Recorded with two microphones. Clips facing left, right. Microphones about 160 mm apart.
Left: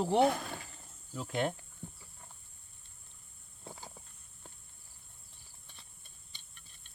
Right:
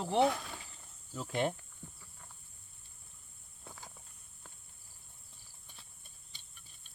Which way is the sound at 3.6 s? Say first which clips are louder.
Left 4 dB; 30° left (ahead or behind).